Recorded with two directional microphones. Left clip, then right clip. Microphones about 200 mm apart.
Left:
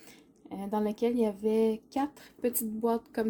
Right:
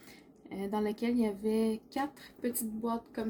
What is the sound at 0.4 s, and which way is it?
Speech, 40° left (ahead or behind).